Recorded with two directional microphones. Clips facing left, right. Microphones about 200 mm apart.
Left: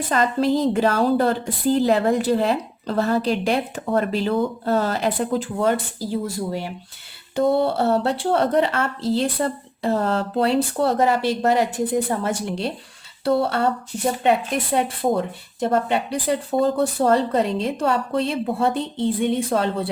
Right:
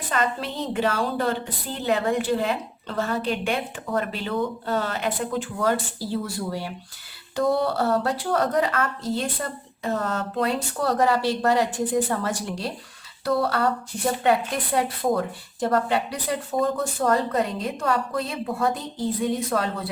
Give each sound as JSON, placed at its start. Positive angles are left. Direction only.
{"t": 0.1, "sound": "a woman's voice", "side_deg": 35}
{"t": 5.6, "sound": "speech", "side_deg": 20}